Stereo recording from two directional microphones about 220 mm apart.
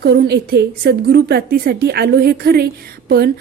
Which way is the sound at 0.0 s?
50° right (ahead or behind).